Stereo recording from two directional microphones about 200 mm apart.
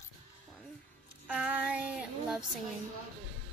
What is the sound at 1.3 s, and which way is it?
Child singing, 5° right (ahead or behind).